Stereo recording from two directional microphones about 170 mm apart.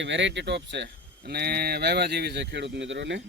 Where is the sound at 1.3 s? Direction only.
70° right (ahead or behind); by 3.2 s 90° right.